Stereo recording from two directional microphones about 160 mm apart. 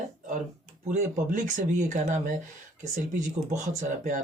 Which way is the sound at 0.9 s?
50° right (ahead or behind).